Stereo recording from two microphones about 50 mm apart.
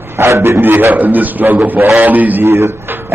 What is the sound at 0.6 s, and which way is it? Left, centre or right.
A man's voice, right.